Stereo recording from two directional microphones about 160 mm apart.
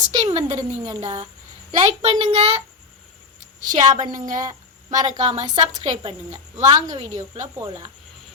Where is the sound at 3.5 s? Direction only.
50° right (ahead or behind).